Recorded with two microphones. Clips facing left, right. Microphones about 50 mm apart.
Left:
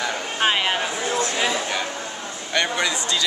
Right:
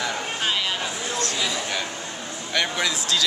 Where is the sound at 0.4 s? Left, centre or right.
Left.